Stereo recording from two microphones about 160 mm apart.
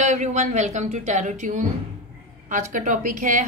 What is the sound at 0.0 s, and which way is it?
A woman's voice, 50° right (ahead or behind).